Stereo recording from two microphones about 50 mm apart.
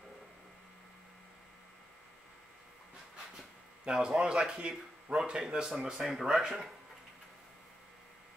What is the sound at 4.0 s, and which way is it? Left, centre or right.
Speech, centre.